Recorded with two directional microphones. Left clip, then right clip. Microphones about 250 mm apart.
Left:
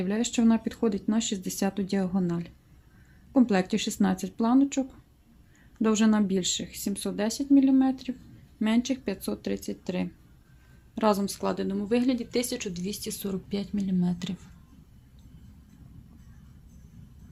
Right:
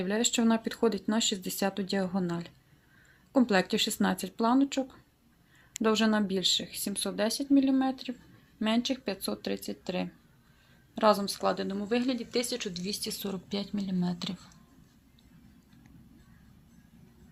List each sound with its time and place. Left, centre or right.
0.0 s speech: centre